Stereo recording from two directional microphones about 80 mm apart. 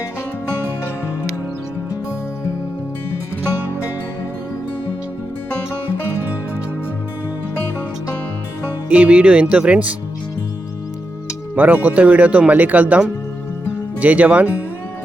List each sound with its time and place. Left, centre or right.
8.9 s speech: centre
11.5 s speech: centre